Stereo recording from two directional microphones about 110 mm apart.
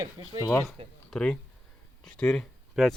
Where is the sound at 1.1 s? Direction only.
10° left (ahead or behind).